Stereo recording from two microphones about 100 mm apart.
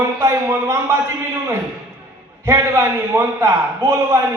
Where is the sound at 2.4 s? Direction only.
30° right (ahead or behind).